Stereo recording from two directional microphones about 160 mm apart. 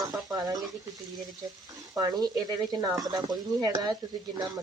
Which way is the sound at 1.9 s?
25° right (ahead or behind).